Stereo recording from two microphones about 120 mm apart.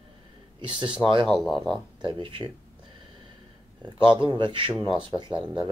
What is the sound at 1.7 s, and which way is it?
Speech, 40° right (ahead or behind).